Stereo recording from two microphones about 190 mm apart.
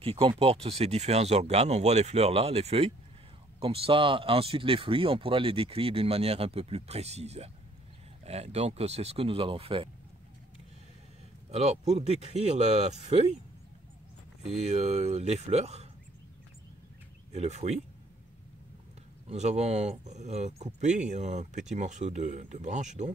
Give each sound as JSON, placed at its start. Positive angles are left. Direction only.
{"t": 0.0, "sound": "speech", "side_deg": -30}
{"t": 11.5, "sound": "speech", "side_deg": -35}
{"t": 14.6, "sound": "speech", "side_deg": -35}
{"t": 17.3, "sound": "speech", "side_deg": -35}
{"t": 19.2, "sound": "speech", "side_deg": -35}